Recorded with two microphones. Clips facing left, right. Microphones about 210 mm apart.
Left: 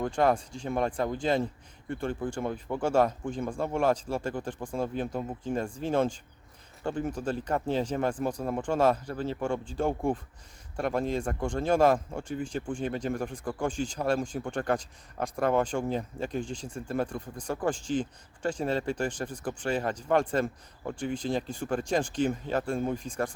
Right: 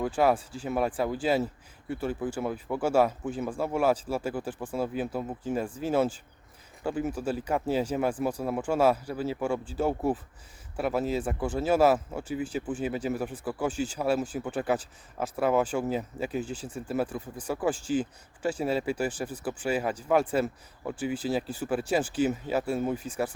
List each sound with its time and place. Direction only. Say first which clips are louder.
0.0 s speech: right 1 dB; 5° right (ahead or behind)